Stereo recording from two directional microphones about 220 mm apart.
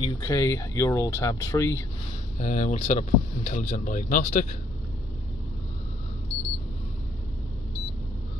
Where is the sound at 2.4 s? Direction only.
35° left (ahead or behind).